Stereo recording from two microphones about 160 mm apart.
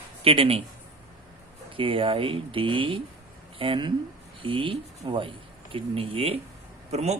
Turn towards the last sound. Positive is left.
turn(degrees=-40)  # may be behind; listen again after turning